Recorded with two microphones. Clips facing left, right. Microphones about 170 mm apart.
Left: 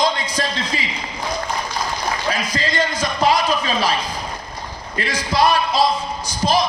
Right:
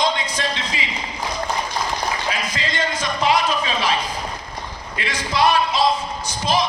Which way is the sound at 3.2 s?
40° left (ahead or behind).